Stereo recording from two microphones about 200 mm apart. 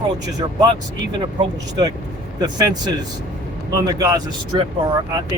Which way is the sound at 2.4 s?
20° right (ahead or behind).